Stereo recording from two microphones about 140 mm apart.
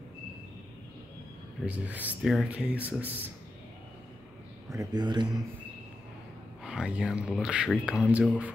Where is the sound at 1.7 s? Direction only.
10° right (ahead or behind).